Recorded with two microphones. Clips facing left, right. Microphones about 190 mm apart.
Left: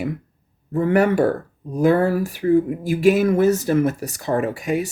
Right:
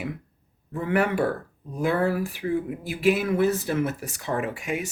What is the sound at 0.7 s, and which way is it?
Speech, 40° left (ahead or behind).